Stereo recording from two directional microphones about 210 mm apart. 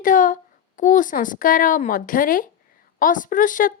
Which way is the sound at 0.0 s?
40° left (ahead or behind).